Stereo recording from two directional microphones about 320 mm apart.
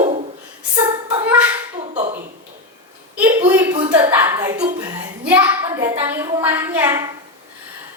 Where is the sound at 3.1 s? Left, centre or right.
Centre.